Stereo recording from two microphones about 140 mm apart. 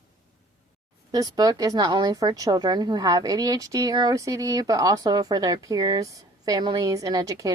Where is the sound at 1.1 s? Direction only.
25° right (ahead or behind).